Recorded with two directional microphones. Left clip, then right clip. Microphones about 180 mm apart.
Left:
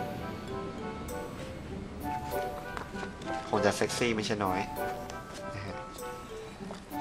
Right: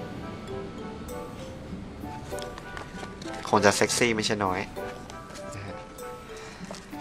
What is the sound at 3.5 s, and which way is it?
Speech, 20° right (ahead or behind).